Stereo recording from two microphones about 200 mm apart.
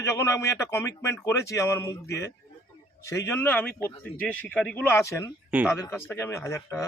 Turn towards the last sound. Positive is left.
turn(degrees=15)  # may be behind; listen again after turning